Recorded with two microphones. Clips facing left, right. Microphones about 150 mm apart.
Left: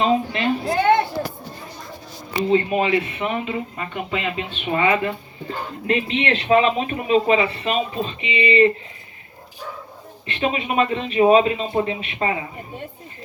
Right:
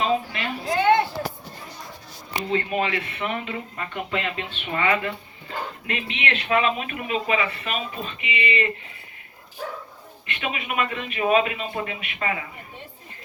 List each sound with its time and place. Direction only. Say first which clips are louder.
0.0 s a sound: left 5 dB; 30° left (ahead or behind)
2.5 s speech: left 6 dB; 25° left (ahead or behind)
10.2 s speech: left 7 dB; 30° left (ahead or behind)